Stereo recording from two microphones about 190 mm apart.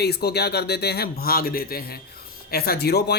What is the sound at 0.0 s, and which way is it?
Speech, 55° left (ahead or behind).